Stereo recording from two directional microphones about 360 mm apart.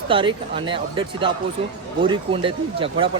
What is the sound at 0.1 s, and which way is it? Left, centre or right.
Speech, centre.